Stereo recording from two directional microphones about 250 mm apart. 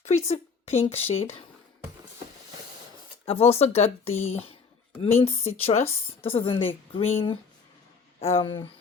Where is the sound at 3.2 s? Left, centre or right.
Left.